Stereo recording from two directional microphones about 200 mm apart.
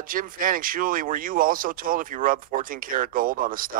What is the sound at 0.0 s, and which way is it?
Speech, 45° right (ahead or behind).